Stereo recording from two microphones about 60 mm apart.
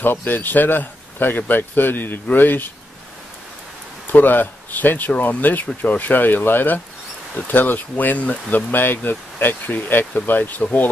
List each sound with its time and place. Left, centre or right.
0.0 s speech: left
4.1 s speech: left